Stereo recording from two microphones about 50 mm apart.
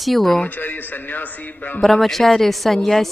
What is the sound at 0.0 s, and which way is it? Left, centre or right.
Speech, centre.